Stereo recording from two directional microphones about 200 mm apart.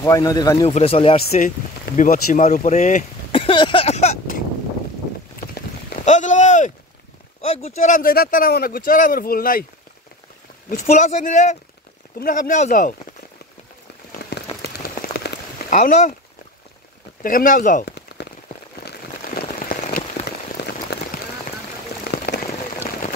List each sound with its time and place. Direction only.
0.0 s a man's voice: 20° left (ahead or behind)
0.7 s speech: 30° left (ahead or behind)
3.3 s a sound: 25° left (ahead or behind)
6.0 s a sound: 35° left (ahead or behind)
7.4 s speech: 30° left (ahead or behind); by 9.7 s 45° left (ahead or behind)
10.7 s speech: 35° left (ahead or behind)
14.3 s rain on surface: 50° left (ahead or behind)
15.7 s speech: 40° left (ahead or behind)
17.2 s speech: 45° left (ahead or behind)
17.8 s rain on surface: 55° left (ahead or behind); by 20.2 s 35° left (ahead or behind)
20.6 s a sound: 55° left (ahead or behind)
21.1 s rain on surface: 45° left (ahead or behind)
22.1 s rain: 55° left (ahead or behind)